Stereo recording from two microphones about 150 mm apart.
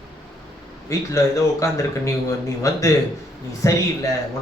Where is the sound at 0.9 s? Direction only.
20° left (ahead or behind).